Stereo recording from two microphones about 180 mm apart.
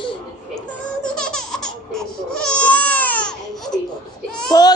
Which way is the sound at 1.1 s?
5° left (ahead or behind).